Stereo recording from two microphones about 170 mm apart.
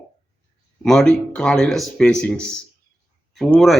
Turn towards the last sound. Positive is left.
turn(degrees=0)  # may be behind; listen again after turning